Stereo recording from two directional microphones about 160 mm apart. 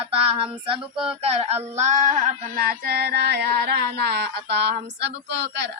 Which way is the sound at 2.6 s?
75° right (ahead or behind).